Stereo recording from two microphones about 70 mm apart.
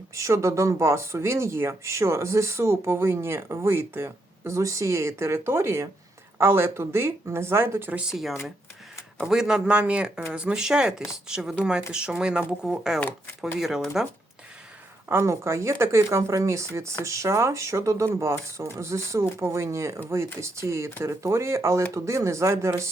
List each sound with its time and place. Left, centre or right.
0.1 s speech: right
8.1 s speech: centre
15.1 s speech: right